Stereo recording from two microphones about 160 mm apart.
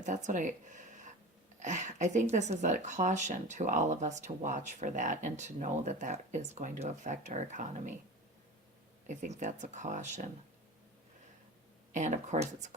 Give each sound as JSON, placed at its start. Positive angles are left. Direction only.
{"t": 0.0, "sound": "speech", "side_deg": -50}
{"t": 9.0, "sound": "speech", "side_deg": -50}
{"t": 11.9, "sound": "speech", "side_deg": -50}